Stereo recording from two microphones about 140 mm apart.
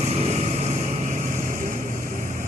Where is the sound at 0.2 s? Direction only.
55° right (ahead or behind).